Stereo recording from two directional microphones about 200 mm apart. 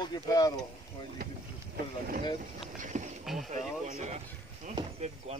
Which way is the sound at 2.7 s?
40° right (ahead or behind).